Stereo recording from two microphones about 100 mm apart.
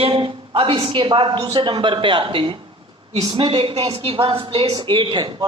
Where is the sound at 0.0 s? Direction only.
65° right (ahead or behind).